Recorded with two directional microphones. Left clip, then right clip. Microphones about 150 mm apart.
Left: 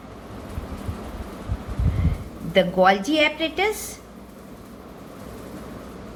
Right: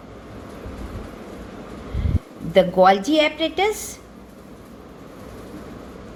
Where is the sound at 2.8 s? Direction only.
35° right (ahead or behind).